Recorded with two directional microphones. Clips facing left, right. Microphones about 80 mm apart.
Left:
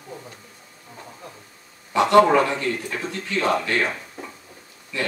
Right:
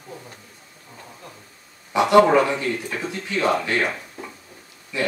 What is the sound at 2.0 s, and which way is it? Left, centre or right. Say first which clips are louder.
A man's voice: even; centre.